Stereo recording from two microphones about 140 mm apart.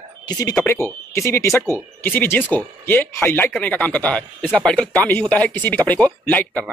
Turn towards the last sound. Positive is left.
turn(degrees=10)  # may be behind; listen again after turning